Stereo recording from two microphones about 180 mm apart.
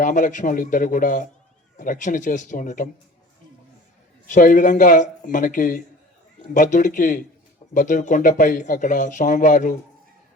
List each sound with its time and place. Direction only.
0.0 s speech: 45° left (ahead or behind)
4.3 s speech: 45° left (ahead or behind)